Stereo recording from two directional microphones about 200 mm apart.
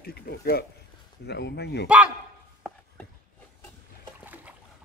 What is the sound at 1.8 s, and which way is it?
Speech, 5° right (ahead or behind).